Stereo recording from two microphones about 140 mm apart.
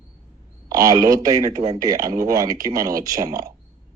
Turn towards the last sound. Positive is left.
turn(degrees=-25)  # may be behind; listen again after turning